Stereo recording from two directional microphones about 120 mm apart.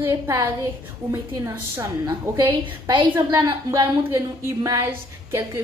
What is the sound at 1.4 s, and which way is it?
A woman's voice, 30° right (ahead or behind).